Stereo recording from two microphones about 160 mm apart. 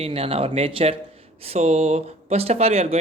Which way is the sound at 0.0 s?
35° right (ahead or behind).